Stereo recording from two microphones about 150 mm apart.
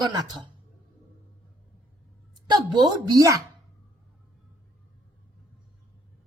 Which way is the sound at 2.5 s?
25° right (ahead or behind).